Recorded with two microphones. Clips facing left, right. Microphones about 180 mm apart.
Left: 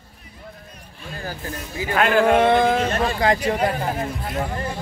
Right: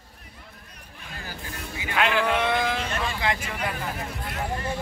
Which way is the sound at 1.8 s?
45° left (ahead or behind).